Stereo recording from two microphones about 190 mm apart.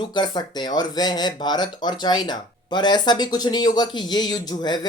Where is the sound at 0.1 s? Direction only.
20° left (ahead or behind).